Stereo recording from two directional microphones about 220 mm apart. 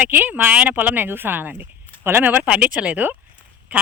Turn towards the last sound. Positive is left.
turn(degrees=-5)  # may be behind; listen again after turning